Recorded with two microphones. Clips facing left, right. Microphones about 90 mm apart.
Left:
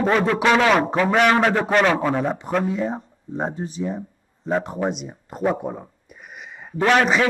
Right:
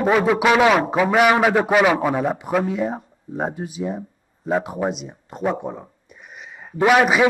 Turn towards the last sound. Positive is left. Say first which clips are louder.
# right 2 dB
turn(degrees=-10)  # may be behind; listen again after turning